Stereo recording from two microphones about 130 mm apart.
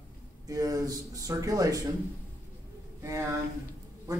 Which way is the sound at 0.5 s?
30° right (ahead or behind).